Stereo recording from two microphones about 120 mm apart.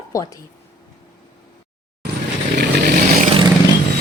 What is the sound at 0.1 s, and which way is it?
Speech, 30° left (ahead or behind).